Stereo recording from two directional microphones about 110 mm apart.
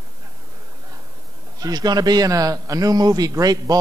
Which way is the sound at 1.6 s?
35° right (ahead or behind).